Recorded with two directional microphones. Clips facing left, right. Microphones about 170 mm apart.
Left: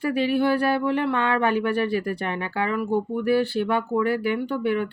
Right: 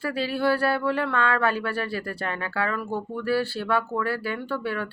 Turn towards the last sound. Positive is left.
turn(degrees=20)  # may be behind; listen again after turning